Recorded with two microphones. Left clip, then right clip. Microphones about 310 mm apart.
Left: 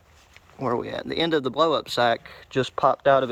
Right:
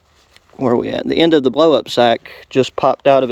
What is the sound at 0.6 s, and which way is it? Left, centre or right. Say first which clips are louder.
Speech: right 10 dB; right.